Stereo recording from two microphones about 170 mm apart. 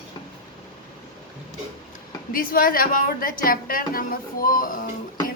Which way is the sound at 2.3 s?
55° left (ahead or behind).